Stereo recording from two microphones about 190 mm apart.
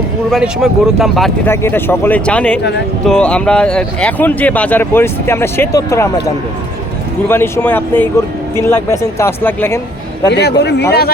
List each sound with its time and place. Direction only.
0.3 s speech: centre (ahead or behind)
1.5 s speech: 10° left (ahead or behind)
10.2 s speech: 65° left (ahead or behind)